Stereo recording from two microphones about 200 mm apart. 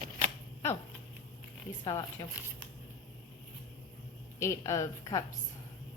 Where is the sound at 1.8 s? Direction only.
20° left (ahead or behind).